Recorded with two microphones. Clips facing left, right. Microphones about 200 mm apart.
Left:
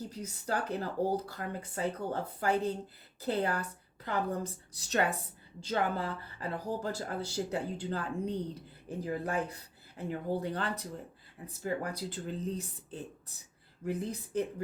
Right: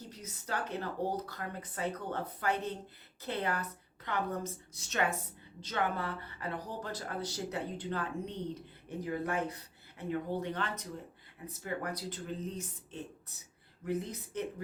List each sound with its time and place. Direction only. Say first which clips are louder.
0.1 s speech: left 1 dB; 30° left (ahead or behind)